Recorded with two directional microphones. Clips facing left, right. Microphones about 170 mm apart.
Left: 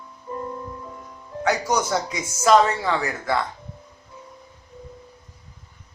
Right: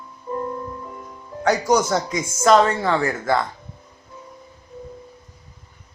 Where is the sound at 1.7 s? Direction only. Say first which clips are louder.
Right 4 dB; 50° right (ahead or behind).